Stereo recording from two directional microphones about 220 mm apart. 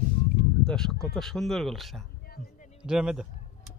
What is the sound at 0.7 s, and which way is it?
Speech, centre (ahead or behind).